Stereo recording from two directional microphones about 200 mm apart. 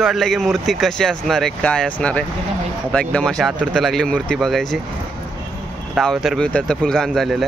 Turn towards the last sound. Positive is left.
turn(degrees=0)  # may be behind; listen again after turning